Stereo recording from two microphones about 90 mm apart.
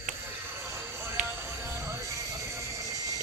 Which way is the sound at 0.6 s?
25° right (ahead or behind).